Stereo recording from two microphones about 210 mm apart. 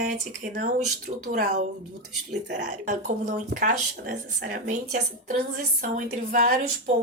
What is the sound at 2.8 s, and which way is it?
Speech, 35° right (ahead or behind).